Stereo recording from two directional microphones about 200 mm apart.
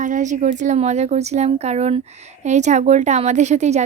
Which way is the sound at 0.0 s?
40° right (ahead or behind).